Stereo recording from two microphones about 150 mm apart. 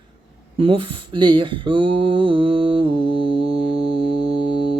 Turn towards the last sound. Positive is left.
turn(degrees=-35)  # may be behind; listen again after turning